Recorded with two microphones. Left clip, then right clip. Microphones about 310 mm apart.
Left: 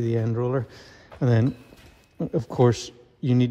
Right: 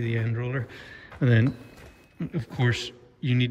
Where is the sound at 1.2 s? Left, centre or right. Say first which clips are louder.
Left 1 dB; centre.